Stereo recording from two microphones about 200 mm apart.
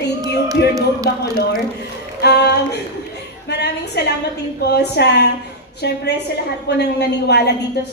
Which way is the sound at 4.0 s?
55° left (ahead or behind).